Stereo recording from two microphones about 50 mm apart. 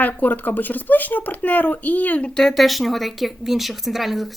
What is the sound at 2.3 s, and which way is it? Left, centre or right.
Speech, centre.